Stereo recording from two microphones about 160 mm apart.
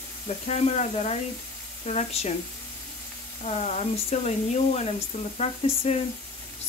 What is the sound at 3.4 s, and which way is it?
Speech, 45° left (ahead or behind).